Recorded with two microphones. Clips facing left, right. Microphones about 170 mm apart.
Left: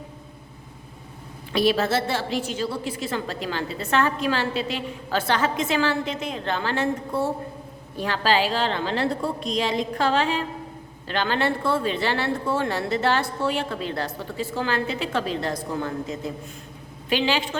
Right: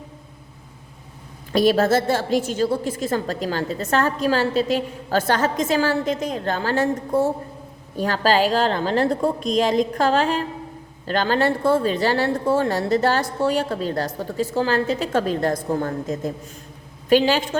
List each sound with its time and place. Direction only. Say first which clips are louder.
1.5 s a woman's voice: right 4 dB; 45° right (ahead or behind)